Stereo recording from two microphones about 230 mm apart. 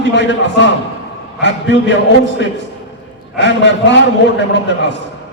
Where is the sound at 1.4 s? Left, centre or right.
Left.